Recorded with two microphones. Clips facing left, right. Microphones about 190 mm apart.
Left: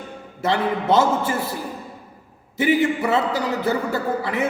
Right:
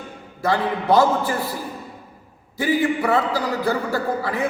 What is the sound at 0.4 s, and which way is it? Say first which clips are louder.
A man's voice: even; 25° left (ahead or behind).